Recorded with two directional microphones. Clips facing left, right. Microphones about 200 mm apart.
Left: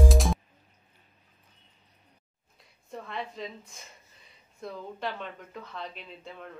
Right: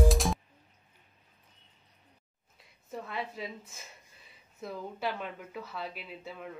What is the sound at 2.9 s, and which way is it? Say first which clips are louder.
A woman's voice: even; 5° right (ahead or behind).